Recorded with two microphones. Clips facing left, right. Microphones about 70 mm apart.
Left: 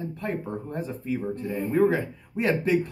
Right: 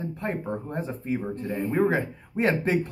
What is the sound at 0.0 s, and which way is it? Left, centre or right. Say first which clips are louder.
Speech: right 1 dB; right.